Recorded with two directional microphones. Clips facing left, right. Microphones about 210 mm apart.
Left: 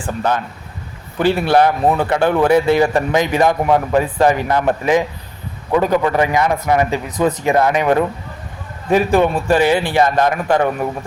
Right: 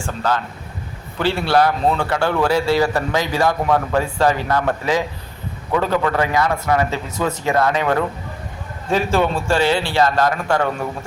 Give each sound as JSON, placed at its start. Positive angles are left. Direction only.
{"t": 0.0, "sound": "a man's voice", "side_deg": 20}